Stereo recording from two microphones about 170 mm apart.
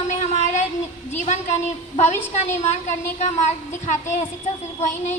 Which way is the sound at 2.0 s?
40° left (ahead or behind).